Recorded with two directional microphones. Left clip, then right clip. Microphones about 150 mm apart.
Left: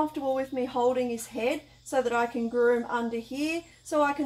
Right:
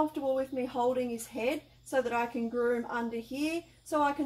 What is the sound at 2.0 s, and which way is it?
A woman's voice, 25° left (ahead or behind).